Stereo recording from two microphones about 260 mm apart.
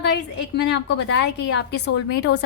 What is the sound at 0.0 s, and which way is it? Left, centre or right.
A woman's voice, left.